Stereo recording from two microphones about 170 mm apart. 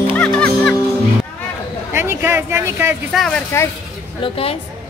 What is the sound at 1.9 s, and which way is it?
Speech, 15° right (ahead or behind).